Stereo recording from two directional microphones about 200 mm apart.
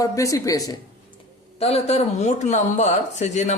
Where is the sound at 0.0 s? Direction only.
15° left (ahead or behind).